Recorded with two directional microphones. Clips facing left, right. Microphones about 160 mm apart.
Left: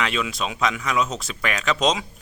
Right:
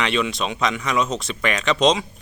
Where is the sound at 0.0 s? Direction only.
Centre (ahead or behind).